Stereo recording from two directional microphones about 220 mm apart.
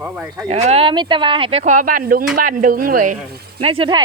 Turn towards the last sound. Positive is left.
turn(degrees=-20)  # may be behind; listen again after turning